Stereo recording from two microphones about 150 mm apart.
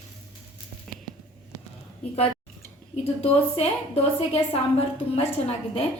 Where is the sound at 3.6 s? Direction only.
40° left (ahead or behind).